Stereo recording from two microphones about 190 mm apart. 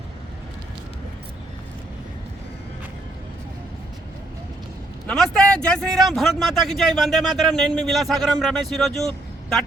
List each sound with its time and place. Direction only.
5.0 s speech: 5° left (ahead or behind)